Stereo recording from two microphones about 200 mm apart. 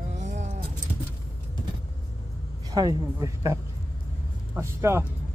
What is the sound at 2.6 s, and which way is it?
A woman's voice, 20° right (ahead or behind).